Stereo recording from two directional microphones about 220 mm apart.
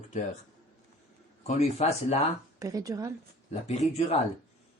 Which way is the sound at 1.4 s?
30° left (ahead or behind).